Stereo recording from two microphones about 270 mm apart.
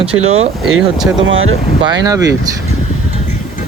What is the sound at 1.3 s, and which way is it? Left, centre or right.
Speech, right.